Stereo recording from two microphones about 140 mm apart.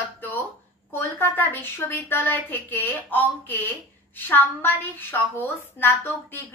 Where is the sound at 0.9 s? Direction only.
15° left (ahead or behind).